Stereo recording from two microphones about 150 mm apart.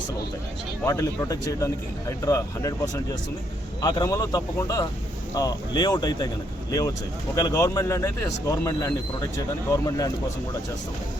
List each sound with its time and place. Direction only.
0.9 s speech: 20° left (ahead or behind)